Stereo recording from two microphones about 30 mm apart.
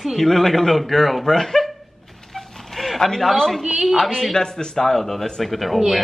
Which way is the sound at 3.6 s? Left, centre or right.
Centre.